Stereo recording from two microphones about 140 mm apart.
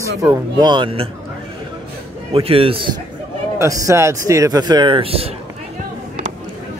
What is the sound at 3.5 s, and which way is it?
Speech, 25° right (ahead or behind).